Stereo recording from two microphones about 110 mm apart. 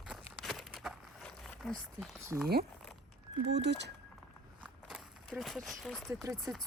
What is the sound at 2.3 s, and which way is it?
Speech, 15° right (ahead or behind).